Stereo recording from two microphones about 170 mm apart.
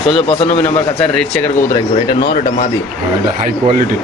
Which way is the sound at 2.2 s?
60° left (ahead or behind).